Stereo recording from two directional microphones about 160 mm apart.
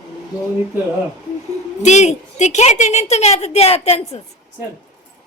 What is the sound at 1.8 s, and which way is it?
A woman's voice, 45° left (ahead or behind).